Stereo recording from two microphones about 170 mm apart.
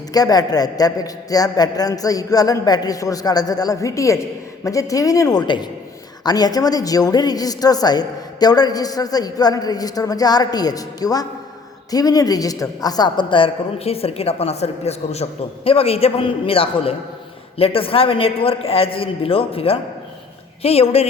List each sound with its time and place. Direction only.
0.1 s a man's voice: 20° left (ahead or behind)